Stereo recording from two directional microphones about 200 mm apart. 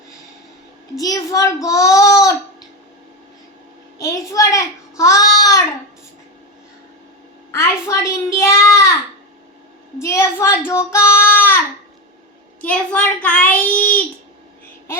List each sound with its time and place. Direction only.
0.9 s a child's voice: 15° left (ahead or behind)
3.9 s a sound: 15° left (ahead or behind)
7.5 s a child's voice: 15° left (ahead or behind)
10.0 s a child's voice: 15° left (ahead or behind)
12.6 s a child's voice: 5° left (ahead or behind)